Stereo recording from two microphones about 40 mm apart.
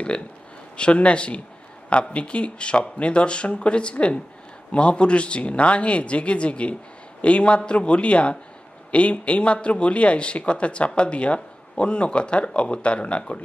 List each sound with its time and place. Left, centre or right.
0.7 s speech: left